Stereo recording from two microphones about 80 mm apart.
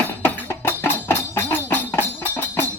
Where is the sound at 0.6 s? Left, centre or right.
Left.